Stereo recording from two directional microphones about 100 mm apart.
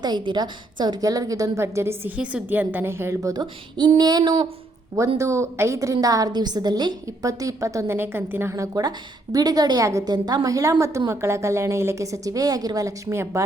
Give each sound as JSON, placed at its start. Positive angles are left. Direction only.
{"t": 0.0, "sound": "a woman's voice", "side_deg": -45}
{"t": 2.1, "sound": "a woman's voice", "side_deg": -15}
{"t": 3.4, "sound": "female singing", "side_deg": -50}
{"t": 4.9, "sound": "a woman's voice", "side_deg": -30}
{"t": 7.9, "sound": "a woman's voice", "side_deg": -20}